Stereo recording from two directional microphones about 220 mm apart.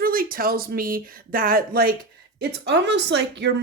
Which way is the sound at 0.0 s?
40° right (ahead or behind).